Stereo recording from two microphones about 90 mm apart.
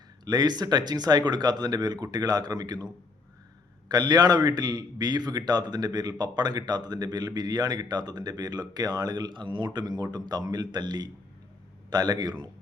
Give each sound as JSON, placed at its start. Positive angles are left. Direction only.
{"t": 0.3, "sound": "a man's voice", "side_deg": -50}